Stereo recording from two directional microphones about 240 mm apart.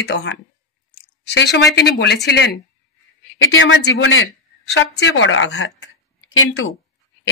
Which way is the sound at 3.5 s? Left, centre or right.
Left.